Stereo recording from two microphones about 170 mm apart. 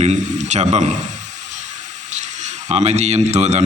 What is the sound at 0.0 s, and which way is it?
Speech, 45° right (ahead or behind).